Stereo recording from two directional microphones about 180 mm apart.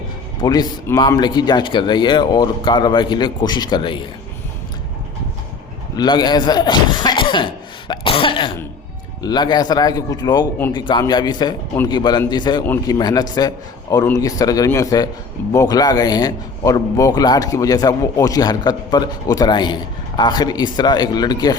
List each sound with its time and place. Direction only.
0.4 s a man's voice: 20° left (ahead or behind)
6.0 s a man's voice: 25° left (ahead or behind)
7.9 s cough: 30° left (ahead or behind)
9.2 s a man's voice: 25° left (ahead or behind)